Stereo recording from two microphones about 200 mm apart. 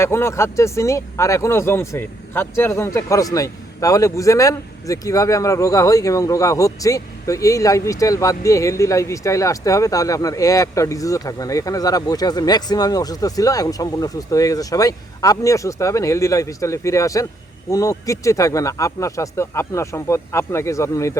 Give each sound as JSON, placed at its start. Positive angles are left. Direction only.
{"t": 0.0, "sound": "speech", "side_deg": 15}